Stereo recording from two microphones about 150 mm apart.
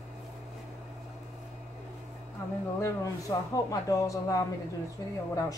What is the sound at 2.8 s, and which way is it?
Speech, 20° left (ahead or behind).